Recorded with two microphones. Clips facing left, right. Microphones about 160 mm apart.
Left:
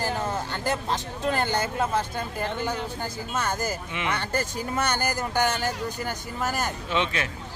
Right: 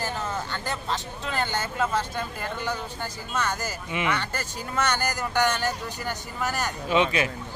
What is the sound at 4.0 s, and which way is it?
Speech, 5° right (ahead or behind).